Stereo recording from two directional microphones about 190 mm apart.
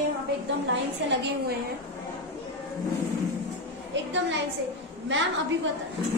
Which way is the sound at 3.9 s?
75° right (ahead or behind).